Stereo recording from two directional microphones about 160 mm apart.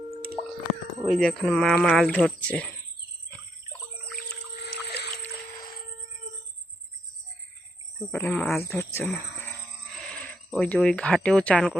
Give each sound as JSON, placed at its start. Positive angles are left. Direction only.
{"t": 1.0, "sound": "speech", "side_deg": 0}
{"t": 4.6, "sound": "a sound", "side_deg": 90}
{"t": 7.9, "sound": "speech", "side_deg": 10}